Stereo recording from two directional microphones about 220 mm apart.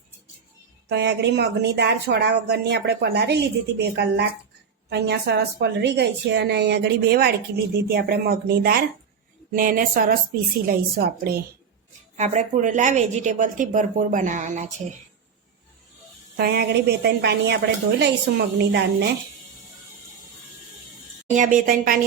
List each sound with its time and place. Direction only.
0.9 s a woman's voice: 50° right (ahead or behind)
12.1 s a woman's voice: 30° right (ahead or behind)
16.4 s a woman's voice: 50° right (ahead or behind)
21.2 s a woman's voice: 35° right (ahead or behind)